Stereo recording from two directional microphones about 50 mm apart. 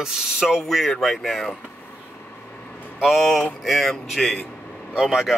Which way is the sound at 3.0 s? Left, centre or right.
Centre.